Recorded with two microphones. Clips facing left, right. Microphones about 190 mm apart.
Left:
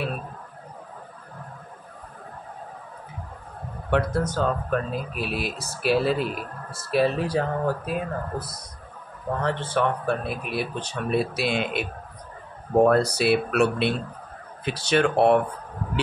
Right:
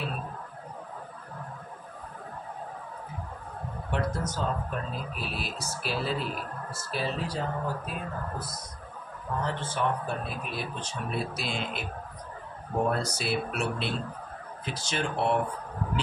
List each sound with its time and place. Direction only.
3.9 s speech: 65° left (ahead or behind)
12.8 s speech: 70° left (ahead or behind)